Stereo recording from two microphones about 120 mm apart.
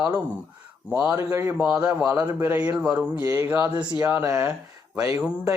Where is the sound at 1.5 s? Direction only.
10° right (ahead or behind).